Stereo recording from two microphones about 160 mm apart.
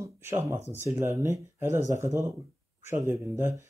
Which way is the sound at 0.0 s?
15° right (ahead or behind).